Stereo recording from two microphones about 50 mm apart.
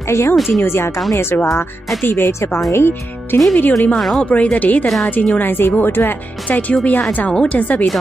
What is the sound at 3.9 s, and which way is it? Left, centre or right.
Speech, centre.